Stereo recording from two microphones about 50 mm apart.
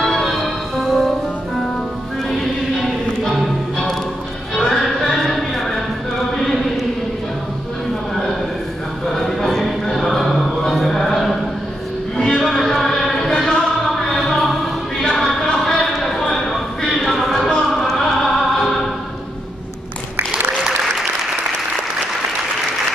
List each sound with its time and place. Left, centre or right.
0.0 s music: centre
3.3 s music: centre
4.6 s a sound: centre
8.1 s a sound: centre
9.0 s music: centre
12.4 s music: centre
13.8 s choir: centre
16.3 s a sound: centre
20.2 s applause: centre